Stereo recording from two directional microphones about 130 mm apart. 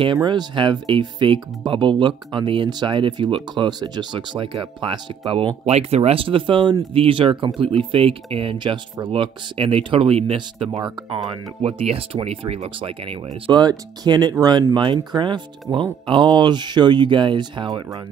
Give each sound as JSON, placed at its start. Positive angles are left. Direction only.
{"t": 0.0, "sound": "speech", "side_deg": -40}
{"t": 13.6, "sound": "speech", "side_deg": -35}